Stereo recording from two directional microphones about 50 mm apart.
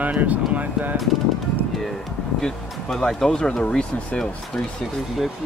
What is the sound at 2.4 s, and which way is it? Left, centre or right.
Speech, centre.